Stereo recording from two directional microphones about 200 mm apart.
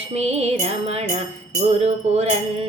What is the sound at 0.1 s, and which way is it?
Music, 30° right (ahead or behind).